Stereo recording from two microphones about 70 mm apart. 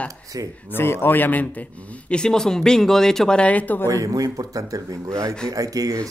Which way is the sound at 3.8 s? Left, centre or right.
Right.